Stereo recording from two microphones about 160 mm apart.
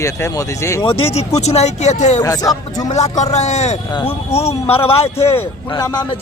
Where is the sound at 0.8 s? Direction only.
35° left (ahead or behind).